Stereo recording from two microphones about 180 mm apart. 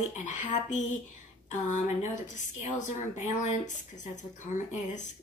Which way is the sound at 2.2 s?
40° left (ahead or behind).